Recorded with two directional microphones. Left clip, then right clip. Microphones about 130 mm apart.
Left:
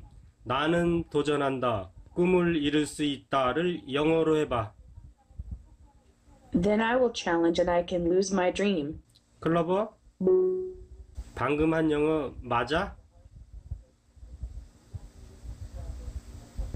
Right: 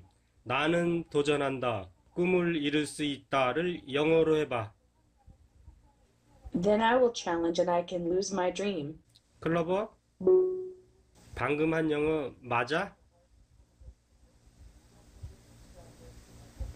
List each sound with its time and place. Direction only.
0.5 s a man's voice: 5° left (ahead or behind)
6.5 s a man's voice: 5° left (ahead or behind)